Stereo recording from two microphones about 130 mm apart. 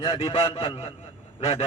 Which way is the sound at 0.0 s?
40° left (ahead or behind).